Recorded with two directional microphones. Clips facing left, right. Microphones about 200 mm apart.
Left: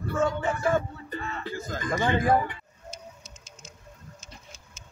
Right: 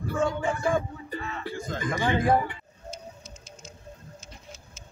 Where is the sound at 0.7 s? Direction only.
10° right (ahead or behind).